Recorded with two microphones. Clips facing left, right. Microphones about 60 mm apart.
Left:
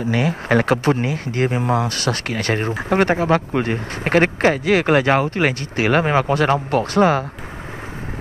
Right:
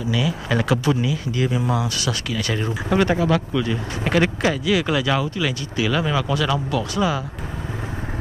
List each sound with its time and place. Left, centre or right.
0.0 s speech: left